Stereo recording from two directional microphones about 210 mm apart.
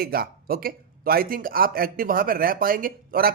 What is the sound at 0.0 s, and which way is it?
Speech, 45° right (ahead or behind).